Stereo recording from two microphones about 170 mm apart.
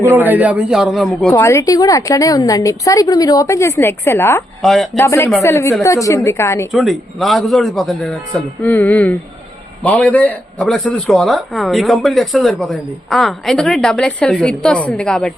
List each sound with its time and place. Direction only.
0.1 s a man's voice: 10° right (ahead or behind)
1.3 s a woman's voice: 15° left (ahead or behind)
4.6 s a man's voice: centre (ahead or behind)
4.9 s a woman's voice: 15° left (ahead or behind)
6.7 s a man's voice: centre (ahead or behind)